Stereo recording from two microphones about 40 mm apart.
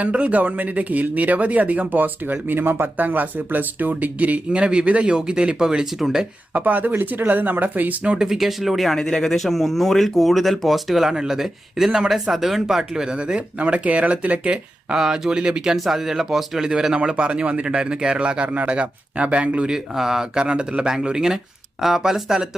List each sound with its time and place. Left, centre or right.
0.0 s speech: right
3.0 s speech: right
4.2 s a man's voice: right; by 6.2 s centre
6.5 s speech: right
8.2 s speech: centre
9.0 s speech: centre
9.3 s speech: centre
11.1 s a man's voice: centre
11.3 s speech: centre
12.9 s speech: centre
14.9 s speech: centre
17.2 s a man's voice: right
19.7 s a man's voice: centre
21.8 s speech: centre